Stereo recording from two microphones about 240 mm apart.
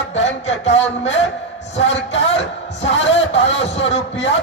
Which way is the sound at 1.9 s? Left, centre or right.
Left.